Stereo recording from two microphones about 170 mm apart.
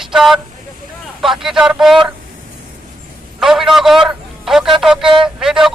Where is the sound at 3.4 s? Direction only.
Centre (ahead or behind).